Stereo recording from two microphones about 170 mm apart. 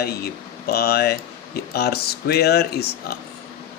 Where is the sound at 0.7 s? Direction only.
70° left (ahead or behind).